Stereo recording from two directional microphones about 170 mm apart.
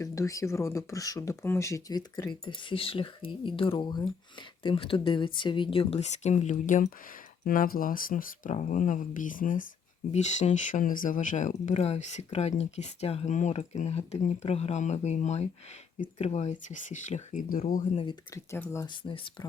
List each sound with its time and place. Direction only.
0.0 s speech: 20° left (ahead or behind); by 6.9 s 45° left (ahead or behind)
7.4 s speech: 55° left (ahead or behind)
17.9 s speech: 30° left (ahead or behind)
18.3 s speech: 15° left (ahead or behind)
19.0 s speech: 30° left (ahead or behind)